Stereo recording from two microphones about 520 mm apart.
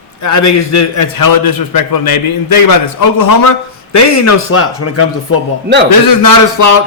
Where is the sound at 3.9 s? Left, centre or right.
Left.